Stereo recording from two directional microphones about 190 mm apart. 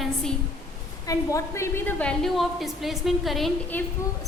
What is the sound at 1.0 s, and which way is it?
A woman's voice, 15° left (ahead or behind).